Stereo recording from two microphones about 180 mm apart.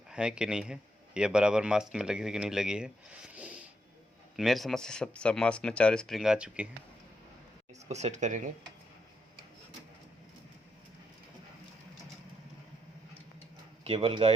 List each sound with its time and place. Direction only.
0.1 s speech: 5° right (ahead or behind)
7.9 s speech: 40° right (ahead or behind)
13.8 s speech: 30° right (ahead or behind)